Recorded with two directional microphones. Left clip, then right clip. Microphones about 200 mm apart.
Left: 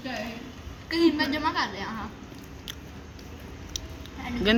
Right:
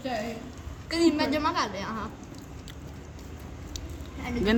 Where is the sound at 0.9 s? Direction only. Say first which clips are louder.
Left 1 dB; 70° right (ahead or behind).